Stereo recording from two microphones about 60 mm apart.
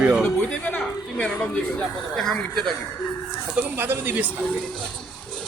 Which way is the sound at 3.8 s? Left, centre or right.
Right.